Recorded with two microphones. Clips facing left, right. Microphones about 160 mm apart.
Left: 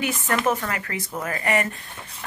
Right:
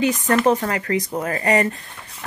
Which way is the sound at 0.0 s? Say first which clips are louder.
Right 6 dB; 35° right (ahead or behind).